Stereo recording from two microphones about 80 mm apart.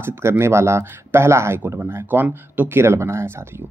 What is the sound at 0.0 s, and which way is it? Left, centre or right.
Speech, right.